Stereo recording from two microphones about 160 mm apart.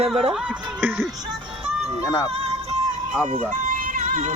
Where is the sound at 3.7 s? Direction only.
55° right (ahead or behind).